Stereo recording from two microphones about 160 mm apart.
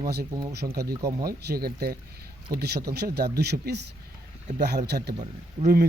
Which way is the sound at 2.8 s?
85° right.